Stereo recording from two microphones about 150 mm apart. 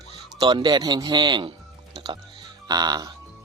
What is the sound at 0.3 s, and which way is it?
Speech, 30° right (ahead or behind).